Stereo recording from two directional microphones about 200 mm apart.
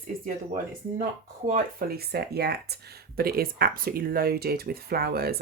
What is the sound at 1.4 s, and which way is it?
Speech, 45° right (ahead or behind).